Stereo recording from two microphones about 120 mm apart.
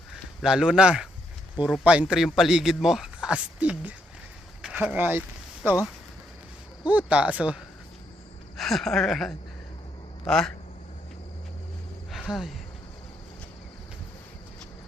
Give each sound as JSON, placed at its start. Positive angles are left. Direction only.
{"t": 0.4, "sound": "a man's voice", "side_deg": -5}
{"t": 6.8, "sound": "a man's voice", "side_deg": -10}
{"t": 8.5, "sound": "speech", "side_deg": 0}
{"t": 12.1, "sound": "a sound", "side_deg": -5}